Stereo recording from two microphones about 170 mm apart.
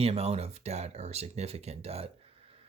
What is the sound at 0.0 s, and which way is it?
Speech, 35° right (ahead or behind).